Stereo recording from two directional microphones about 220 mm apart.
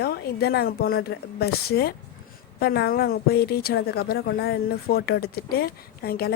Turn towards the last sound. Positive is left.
turn(degrees=45)  # may be behind; listen again after turning